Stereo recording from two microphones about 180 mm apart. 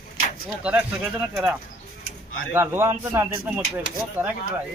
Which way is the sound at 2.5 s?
15° right (ahead or behind).